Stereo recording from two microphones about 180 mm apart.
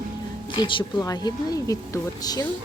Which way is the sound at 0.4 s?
25° left (ahead or behind).